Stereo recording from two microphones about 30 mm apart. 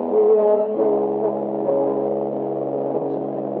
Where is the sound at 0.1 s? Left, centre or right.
Centre.